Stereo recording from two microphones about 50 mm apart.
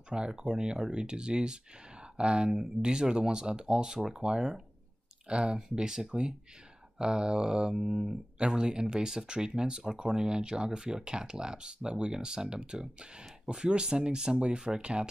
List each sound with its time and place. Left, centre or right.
0.1 s speech: centre